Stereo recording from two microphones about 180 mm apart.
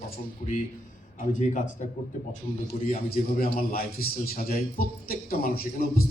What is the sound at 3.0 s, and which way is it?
A man's voice, 55° left (ahead or behind).